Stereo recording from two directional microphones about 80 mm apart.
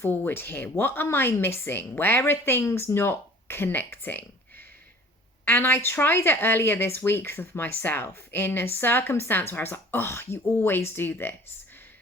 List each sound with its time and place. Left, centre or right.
0.0 s speech: left